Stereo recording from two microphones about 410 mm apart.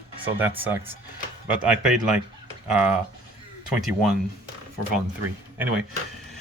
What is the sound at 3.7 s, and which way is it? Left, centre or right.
Speech, centre.